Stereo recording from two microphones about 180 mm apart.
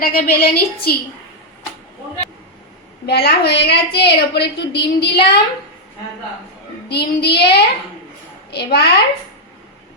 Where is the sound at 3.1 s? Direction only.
65° left (ahead or behind).